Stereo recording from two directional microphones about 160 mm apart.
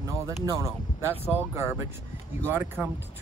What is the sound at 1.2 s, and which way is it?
Speech, 15° right (ahead or behind).